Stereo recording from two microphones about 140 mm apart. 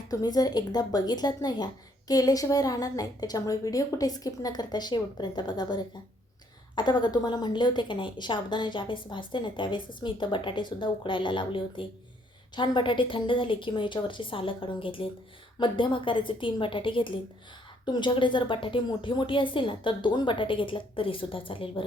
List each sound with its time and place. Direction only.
0.1 s a woman's voice: 30° left (ahead or behind)